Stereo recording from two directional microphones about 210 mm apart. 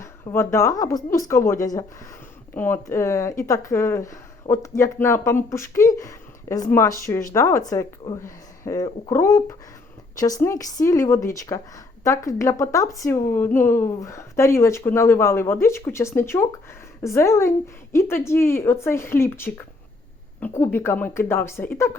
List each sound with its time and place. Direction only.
0.0 s a woman's voice: 15° left (ahead or behind)